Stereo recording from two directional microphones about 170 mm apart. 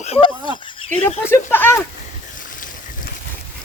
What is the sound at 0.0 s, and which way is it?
Speech, 35° left (ahead or behind).